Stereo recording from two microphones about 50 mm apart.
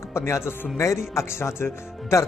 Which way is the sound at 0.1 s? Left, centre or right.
Left.